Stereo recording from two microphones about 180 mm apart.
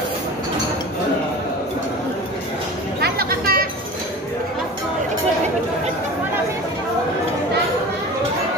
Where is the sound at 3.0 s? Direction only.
55° right (ahead or behind).